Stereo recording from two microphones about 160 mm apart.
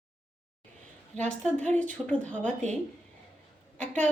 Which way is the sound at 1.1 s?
5° left (ahead or behind).